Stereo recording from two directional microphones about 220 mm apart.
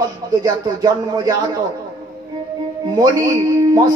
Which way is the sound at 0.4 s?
20° right (ahead or behind).